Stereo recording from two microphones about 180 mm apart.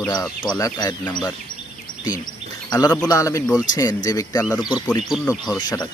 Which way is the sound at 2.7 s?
20° left (ahead or behind).